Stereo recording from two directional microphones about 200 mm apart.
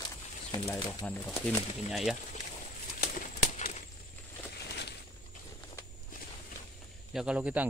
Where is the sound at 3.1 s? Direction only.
40° left (ahead or behind).